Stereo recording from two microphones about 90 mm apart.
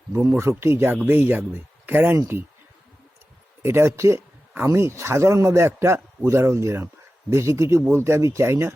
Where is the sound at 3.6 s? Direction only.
30° right (ahead or behind).